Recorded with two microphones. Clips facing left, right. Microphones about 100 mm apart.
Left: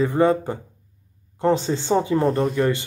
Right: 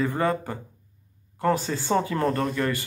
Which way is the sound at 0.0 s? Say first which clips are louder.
Left 6 dB; 20° left (ahead or behind).